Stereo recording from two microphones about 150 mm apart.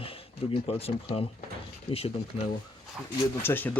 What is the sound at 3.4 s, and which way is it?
Speech, 15° left (ahead or behind).